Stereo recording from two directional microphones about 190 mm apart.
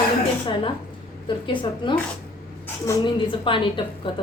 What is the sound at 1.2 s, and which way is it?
A woman's voice, 25° left (ahead or behind).